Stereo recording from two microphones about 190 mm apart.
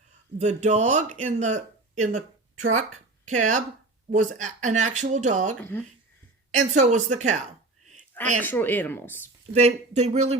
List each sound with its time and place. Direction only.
0.3 s speech: 40° right (ahead or behind)
6.6 s speech: 40° right (ahead or behind)
8.4 s speech: 10° left (ahead or behind)
9.5 s speech: 35° right (ahead or behind)